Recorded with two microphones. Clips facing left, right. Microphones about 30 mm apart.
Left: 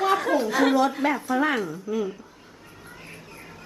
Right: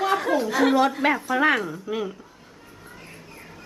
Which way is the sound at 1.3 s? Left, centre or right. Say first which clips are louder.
Right 3 dB; right.